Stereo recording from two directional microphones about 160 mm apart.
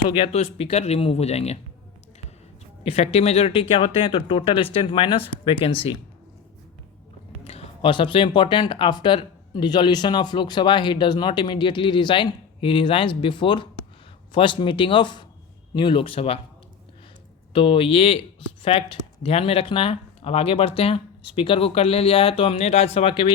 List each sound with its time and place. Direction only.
0.2 s speech: 40° left (ahead or behind)
2.8 s speech: 40° left (ahead or behind)
7.4 s speech: 40° left (ahead or behind)
17.5 s speech: 35° left (ahead or behind)